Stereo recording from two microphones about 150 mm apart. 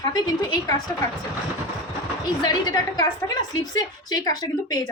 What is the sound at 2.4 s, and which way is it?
Speech, 25° left (ahead or behind).